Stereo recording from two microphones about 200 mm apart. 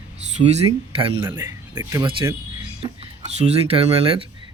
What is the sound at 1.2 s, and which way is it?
Speech, 15° right (ahead or behind).